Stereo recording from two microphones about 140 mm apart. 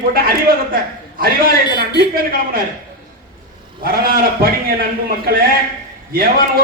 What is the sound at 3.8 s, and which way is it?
Speech, 90° right.